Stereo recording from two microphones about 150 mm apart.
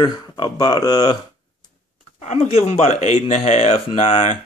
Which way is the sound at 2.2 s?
50° left (ahead or behind).